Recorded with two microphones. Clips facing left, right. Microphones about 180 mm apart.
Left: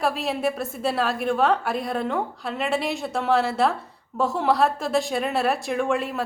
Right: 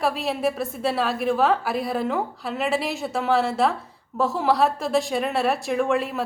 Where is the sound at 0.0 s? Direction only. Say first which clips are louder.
Right 1 dB; centre (ahead or behind).